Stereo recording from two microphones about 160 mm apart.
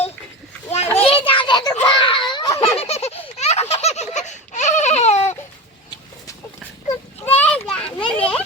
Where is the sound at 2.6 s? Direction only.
40° left (ahead or behind).